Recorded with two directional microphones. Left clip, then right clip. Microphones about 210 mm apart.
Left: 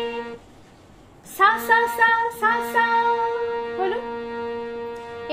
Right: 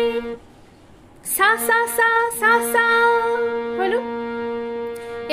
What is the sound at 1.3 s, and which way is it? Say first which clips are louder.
Female singing: even; 50° right (ahead or behind).